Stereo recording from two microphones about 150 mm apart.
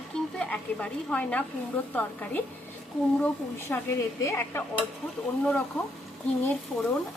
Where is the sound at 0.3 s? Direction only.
10° left (ahead or behind).